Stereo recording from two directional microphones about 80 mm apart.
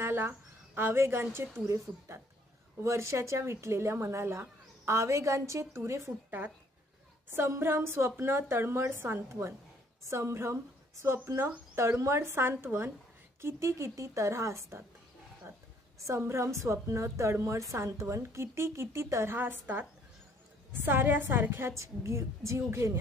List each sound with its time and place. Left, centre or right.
0.0 s a woman's voice: right
7.3 s a woman's voice: right
16.0 s a woman's voice: right